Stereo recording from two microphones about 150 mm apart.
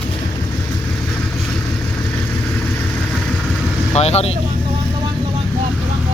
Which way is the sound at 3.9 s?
45° left (ahead or behind).